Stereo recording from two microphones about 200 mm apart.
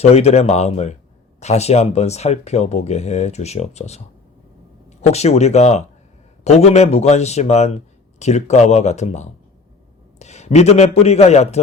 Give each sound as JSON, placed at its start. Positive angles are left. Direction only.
{"t": 0.0, "sound": "speech", "side_deg": 30}